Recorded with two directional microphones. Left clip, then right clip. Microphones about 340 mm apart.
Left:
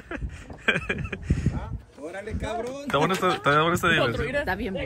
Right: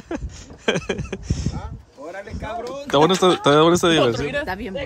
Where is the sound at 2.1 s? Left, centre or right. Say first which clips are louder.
Right 2 dB; left.